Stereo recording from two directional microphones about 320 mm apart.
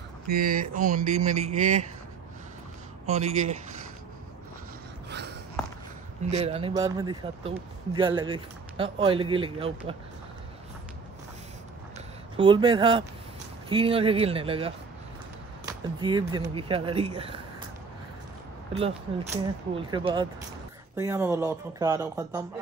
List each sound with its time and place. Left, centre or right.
0.5 s speech: right
3.1 s speech: right
6.3 s a man's voice: centre
12.4 s a man's voice: centre
19.3 s a man's voice: centre